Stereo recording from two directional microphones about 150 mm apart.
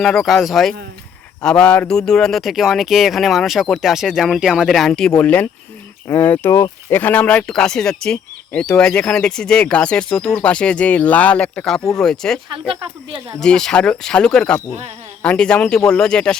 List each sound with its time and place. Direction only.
0.0 s speech: centre (ahead or behind)
12.7 s speech: 35° right (ahead or behind)
13.4 s speech: 5° left (ahead or behind)